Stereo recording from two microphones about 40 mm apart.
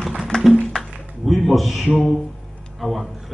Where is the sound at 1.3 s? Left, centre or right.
Centre.